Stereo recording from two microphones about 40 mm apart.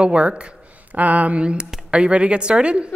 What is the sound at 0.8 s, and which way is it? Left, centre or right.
Speech, right.